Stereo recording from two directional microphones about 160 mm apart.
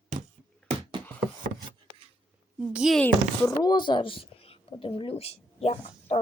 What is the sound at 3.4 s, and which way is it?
Speech, 25° left (ahead or behind).